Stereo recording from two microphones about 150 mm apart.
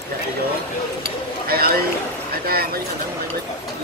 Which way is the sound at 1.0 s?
90° right.